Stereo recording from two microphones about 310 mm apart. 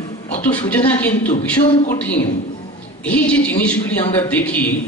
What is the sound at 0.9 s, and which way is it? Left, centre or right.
Speech, centre.